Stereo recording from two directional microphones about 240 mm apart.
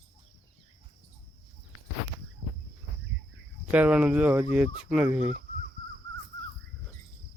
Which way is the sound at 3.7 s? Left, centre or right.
Centre.